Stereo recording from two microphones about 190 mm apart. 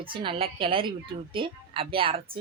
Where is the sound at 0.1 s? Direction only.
25° right (ahead or behind).